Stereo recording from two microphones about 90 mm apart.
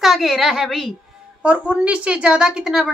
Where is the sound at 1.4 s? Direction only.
15° right (ahead or behind).